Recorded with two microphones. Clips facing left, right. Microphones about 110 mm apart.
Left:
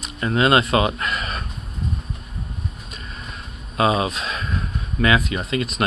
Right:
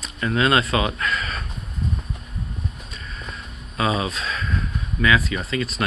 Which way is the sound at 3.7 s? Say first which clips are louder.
Left 4 dB; 55° left (ahead or behind).